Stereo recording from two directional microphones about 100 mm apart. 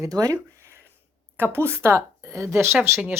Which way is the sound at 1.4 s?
25° right (ahead or behind).